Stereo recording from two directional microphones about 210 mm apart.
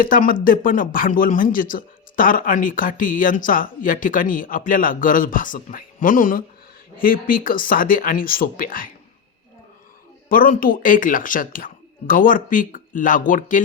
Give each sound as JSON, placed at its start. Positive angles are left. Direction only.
{"t": 0.0, "sound": "speech", "side_deg": 40}
{"t": 10.2, "sound": "speech", "side_deg": 40}